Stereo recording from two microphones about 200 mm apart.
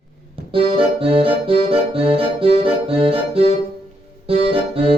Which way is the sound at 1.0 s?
25° right (ahead or behind).